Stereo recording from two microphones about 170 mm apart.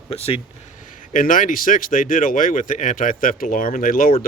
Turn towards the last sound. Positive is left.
turn(degrees=55)  # may be behind; listen again after turning